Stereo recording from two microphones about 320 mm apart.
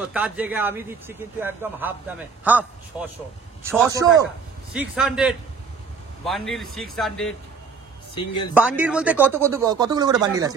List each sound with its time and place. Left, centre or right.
0.0 s speech: centre
3.6 s speech: centre
8.1 s speech: centre
8.5 s speech: centre